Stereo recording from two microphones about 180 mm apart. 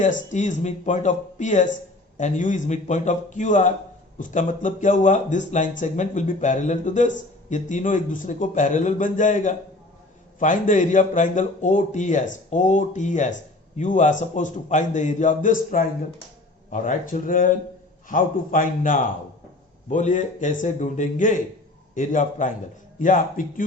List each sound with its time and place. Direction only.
0.0 s a man's voice: 40° left (ahead or behind)
16.6 s a man's voice: 45° left (ahead or behind)